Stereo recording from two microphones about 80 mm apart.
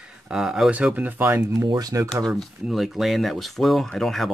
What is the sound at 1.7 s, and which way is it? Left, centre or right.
Speech, right.